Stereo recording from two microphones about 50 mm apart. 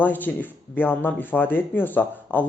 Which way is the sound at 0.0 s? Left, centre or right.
Left.